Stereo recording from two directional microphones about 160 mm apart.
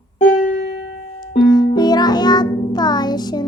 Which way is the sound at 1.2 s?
25° left (ahead or behind).